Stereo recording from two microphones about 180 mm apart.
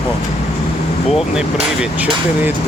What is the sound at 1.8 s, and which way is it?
Speech, 10° right (ahead or behind).